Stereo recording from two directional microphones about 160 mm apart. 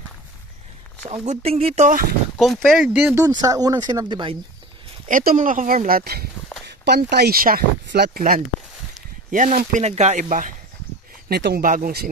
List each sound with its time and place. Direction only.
1.0 s speech: 40° right (ahead or behind)
2.3 s speech: centre (ahead or behind)
3.2 s speech: 25° right (ahead or behind)
5.0 s speech: 60° right (ahead or behind)
6.6 s speech: 90° right; by 10.5 s 55° right (ahead or behind)
11.2 s speech: 85° right